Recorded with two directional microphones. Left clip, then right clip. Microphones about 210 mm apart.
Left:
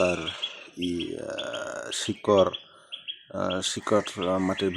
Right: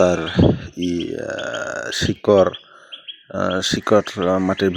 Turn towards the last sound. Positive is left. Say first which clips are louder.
# right 8 dB
turn(degrees=-25)  # may be behind; listen again after turning